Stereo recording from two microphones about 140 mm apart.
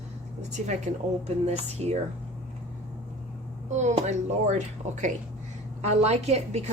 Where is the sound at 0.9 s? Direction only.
60° right (ahead or behind).